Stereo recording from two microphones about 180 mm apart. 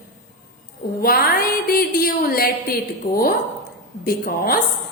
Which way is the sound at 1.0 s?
55° left (ahead or behind).